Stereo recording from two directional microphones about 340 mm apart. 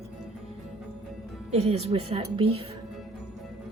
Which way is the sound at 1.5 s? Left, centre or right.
Centre.